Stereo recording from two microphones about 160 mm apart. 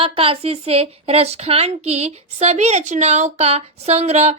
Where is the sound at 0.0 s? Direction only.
35° right (ahead or behind).